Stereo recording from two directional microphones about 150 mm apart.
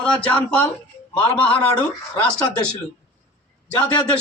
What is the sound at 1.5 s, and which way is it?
Speech, 35° left (ahead or behind).